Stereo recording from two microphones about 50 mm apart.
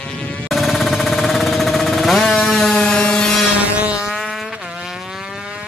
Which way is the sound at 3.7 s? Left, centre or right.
Right.